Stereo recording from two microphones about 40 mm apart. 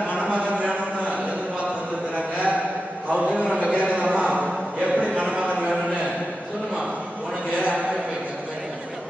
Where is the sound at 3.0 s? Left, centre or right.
Right.